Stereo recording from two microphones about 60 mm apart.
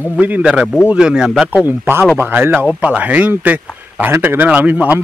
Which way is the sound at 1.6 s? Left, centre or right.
Right.